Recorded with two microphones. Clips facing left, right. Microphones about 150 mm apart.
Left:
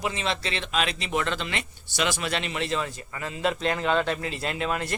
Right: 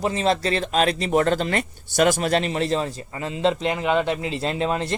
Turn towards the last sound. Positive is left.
turn(degrees=-30)  # may be behind; listen again after turning